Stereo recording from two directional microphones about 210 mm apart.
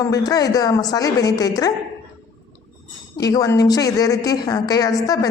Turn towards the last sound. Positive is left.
turn(degrees=15)  # may be behind; listen again after turning